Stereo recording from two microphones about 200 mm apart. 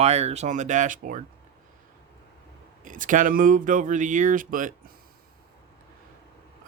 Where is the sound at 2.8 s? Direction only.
40° right (ahead or behind).